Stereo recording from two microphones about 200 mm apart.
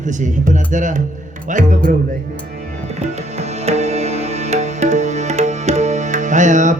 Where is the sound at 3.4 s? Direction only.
35° right (ahead or behind).